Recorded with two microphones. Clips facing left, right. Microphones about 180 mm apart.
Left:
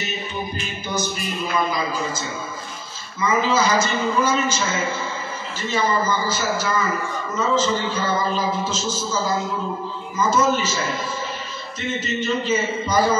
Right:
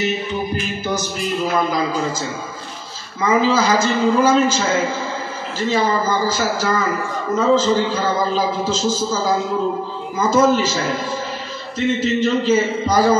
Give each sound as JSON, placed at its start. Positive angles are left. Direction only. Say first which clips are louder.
{"t": 1.1, "sound": "a man's voice", "louder": "right 5 dB", "side_deg": -90}
{"t": 5.7, "sound": "a man's voice", "louder": "right 3 dB", "side_deg": -90}
{"t": 12.0, "sound": "a man's voice", "louder": "right 3 dB", "side_deg": -90}